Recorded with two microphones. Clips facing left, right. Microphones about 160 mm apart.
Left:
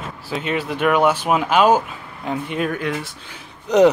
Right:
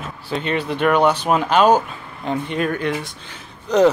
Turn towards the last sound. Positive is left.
turn(degrees=15)  # may be behind; listen again after turning